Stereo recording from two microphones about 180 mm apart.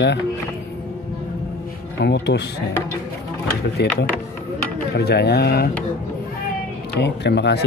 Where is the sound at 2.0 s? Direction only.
70° left (ahead or behind).